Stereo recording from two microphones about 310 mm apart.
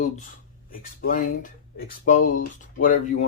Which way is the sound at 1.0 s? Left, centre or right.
Left.